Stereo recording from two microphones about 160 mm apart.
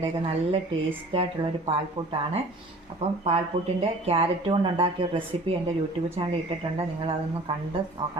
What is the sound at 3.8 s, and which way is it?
A woman's voice, 35° right (ahead or behind).